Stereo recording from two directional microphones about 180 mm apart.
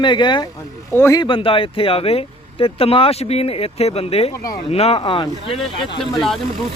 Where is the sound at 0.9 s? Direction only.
15° left (ahead or behind).